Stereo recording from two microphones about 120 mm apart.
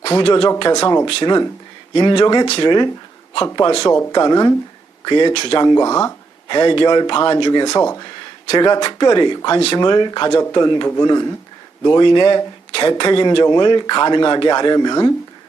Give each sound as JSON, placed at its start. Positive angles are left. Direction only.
{"t": 0.0, "sound": "a man's voice", "side_deg": 50}
{"t": 5.3, "sound": "a man's voice", "side_deg": 55}
{"t": 5.6, "sound": "a man's voice", "side_deg": 35}
{"t": 6.5, "sound": "a man's voice", "side_deg": 45}
{"t": 9.5, "sound": "speech", "side_deg": 55}
{"t": 9.7, "sound": "a man's voice", "side_deg": 40}